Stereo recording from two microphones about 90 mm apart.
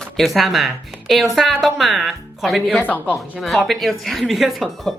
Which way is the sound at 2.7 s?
20° left (ahead or behind).